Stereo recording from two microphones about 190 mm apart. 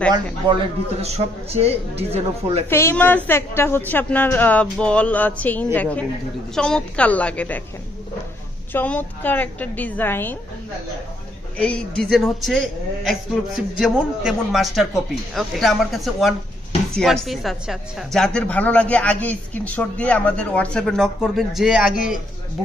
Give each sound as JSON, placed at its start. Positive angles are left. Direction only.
{"t": 1.0, "sound": "a man's voice", "side_deg": -35}
{"t": 2.7, "sound": "a woman's voice", "side_deg": 10}
{"t": 8.7, "sound": "a woman's voice", "side_deg": 10}
{"t": 11.5, "sound": "a woman's voice", "side_deg": 5}